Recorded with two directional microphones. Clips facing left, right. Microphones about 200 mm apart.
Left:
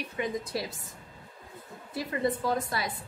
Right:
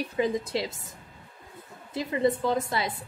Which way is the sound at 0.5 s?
25° right (ahead or behind).